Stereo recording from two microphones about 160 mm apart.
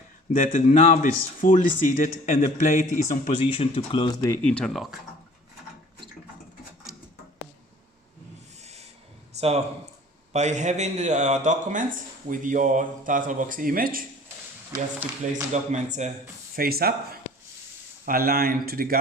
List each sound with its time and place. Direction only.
0.3 s speech: 55° left (ahead or behind); by 4.3 s 30° left (ahead or behind)
4.4 s speech: 5° left (ahead or behind)
8.6 s a sound: 40° right (ahead or behind)
10.3 s speech: 45° right (ahead or behind)
14.9 s speech: 10° right (ahead or behind)
15.5 s speech: 50° right (ahead or behind)
16.6 s speech: 70° right (ahead or behind)